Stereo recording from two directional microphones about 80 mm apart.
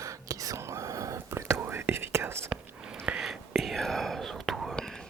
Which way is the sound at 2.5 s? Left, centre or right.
Centre.